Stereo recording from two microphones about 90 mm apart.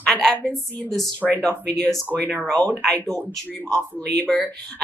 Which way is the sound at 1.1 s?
20° left (ahead or behind).